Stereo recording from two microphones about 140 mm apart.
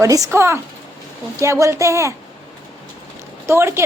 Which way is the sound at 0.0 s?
25° right (ahead or behind).